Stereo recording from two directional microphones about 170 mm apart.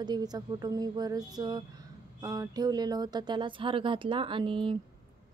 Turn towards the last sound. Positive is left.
turn(degrees=-30)  # may be behind; listen again after turning